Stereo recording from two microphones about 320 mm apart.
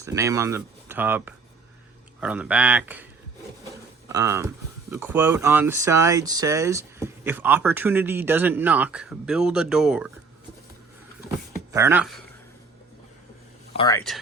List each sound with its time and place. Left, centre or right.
0.0 s speech: centre
4.1 s speech: centre
11.7 s speech: centre
13.7 s speech: centre